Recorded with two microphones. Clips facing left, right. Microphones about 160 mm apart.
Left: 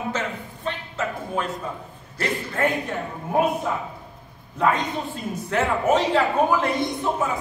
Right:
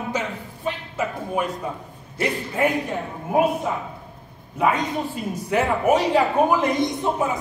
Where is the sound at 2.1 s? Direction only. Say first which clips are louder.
Right 2 dB; 15° right (ahead or behind).